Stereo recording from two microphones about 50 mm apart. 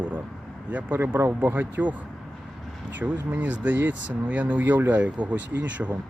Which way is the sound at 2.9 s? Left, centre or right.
Right.